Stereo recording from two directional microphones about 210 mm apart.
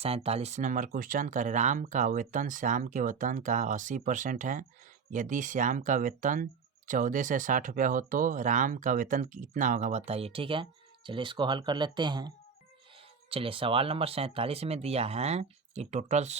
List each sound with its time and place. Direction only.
0.0 s speech: 30° right (ahead or behind)
13.3 s speech: 25° right (ahead or behind)